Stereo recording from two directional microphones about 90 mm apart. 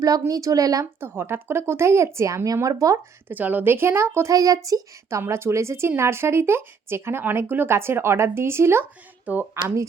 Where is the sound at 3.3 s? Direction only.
20° right (ahead or behind).